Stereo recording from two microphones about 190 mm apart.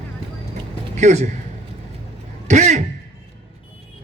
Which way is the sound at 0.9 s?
35° right (ahead or behind).